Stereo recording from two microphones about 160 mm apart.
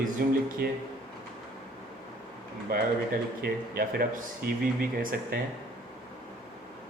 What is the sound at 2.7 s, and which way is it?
Speech, 60° right (ahead or behind).